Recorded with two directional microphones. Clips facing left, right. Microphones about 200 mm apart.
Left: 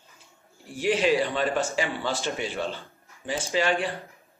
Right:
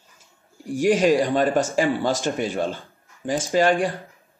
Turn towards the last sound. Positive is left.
turn(degrees=-45)  # may be behind; listen again after turning